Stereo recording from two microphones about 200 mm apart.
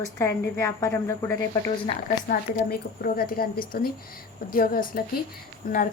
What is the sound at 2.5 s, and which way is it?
A woman's voice, 45° left (ahead or behind).